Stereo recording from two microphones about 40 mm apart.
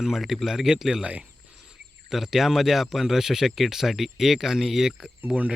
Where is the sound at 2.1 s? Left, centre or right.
Centre.